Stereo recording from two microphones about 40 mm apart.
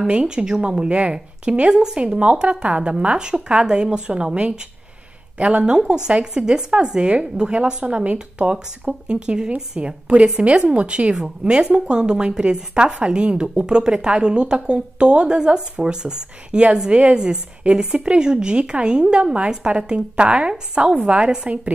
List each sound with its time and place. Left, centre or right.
0.0 s a woman's voice: right